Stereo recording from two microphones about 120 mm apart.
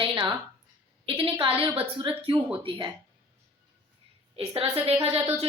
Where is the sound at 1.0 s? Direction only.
50° right (ahead or behind).